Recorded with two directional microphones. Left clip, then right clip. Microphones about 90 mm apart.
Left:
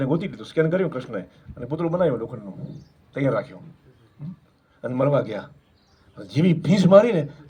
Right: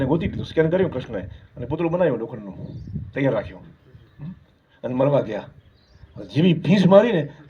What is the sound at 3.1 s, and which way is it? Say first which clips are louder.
Speech: right 1 dB; 35° left (ahead or behind).